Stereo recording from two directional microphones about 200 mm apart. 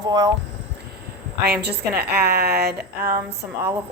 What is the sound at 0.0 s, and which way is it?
Speech, 20° right (ahead or behind).